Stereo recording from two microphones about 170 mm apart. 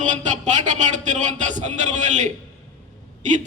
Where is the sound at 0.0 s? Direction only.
45° right (ahead or behind).